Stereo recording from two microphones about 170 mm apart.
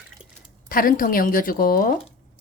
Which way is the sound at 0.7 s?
55° left (ahead or behind).